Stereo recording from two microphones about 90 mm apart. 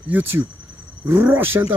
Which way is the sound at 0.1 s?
25° right (ahead or behind).